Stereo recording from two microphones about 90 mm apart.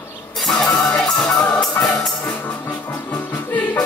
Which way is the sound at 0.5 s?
5° left (ahead or behind).